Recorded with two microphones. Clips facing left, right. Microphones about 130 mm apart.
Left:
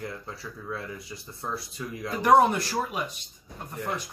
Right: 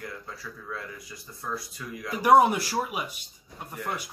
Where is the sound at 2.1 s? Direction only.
10° right (ahead or behind).